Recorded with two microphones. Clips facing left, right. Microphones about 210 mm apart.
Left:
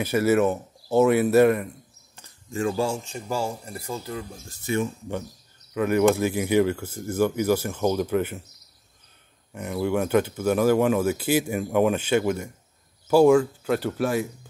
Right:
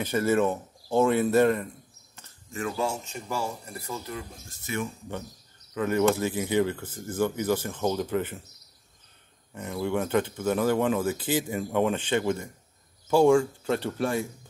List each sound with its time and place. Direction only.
0.0 s speech: 10° left (ahead or behind)
2.5 s speech: 30° left (ahead or behind)
5.8 s speech: 15° left (ahead or behind)
9.5 s speech: 10° left (ahead or behind)